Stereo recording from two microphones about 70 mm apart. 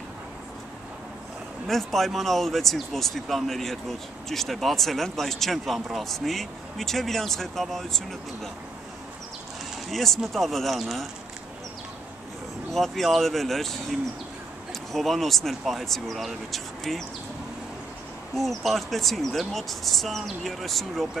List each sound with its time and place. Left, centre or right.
1.7 s speech: centre
9.8 s speech: centre
12.7 s speech: centre
18.3 s speech: centre